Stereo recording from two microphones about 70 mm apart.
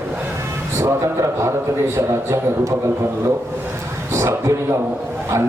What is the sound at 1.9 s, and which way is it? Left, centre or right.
Speech, right.